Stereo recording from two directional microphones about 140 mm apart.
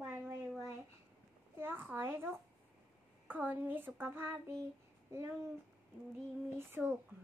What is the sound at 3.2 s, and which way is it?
A child's voice, 15° right (ahead or behind).